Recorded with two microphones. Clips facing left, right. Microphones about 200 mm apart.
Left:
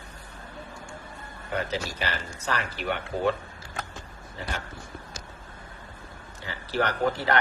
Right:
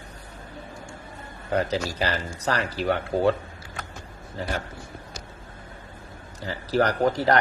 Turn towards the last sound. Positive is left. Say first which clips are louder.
# right 4 dB
turn(degrees=-40)  # may be behind; listen again after turning